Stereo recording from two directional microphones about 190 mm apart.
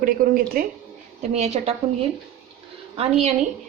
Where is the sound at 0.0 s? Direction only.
50° right (ahead or behind).